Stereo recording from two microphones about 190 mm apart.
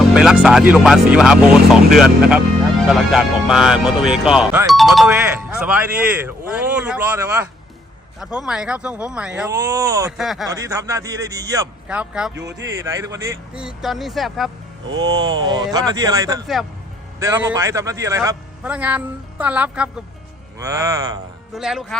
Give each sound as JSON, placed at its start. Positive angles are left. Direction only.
{"t": 0.1, "sound": "speech", "side_deg": -5}
{"t": 8.2, "sound": "speech", "side_deg": -5}
{"t": 9.6, "sound": "a man's voice", "side_deg": -20}
{"t": 10.1, "sound": "speech", "side_deg": 0}
{"t": 10.5, "sound": "a man's voice", "side_deg": -15}
{"t": 11.9, "sound": "speech", "side_deg": -5}
{"t": 12.3, "sound": "speech", "side_deg": -65}
{"t": 12.8, "sound": "speech", "side_deg": -15}
{"t": 14.8, "sound": "a man's voice", "side_deg": -20}
{"t": 21.5, "sound": "speech", "side_deg": -5}